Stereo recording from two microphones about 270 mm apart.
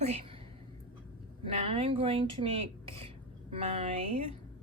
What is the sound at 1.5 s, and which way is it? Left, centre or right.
Speech, right.